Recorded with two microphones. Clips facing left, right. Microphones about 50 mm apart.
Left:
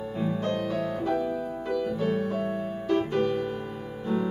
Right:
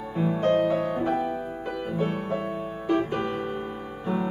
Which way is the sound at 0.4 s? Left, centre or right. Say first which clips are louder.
Right 10 dB; right.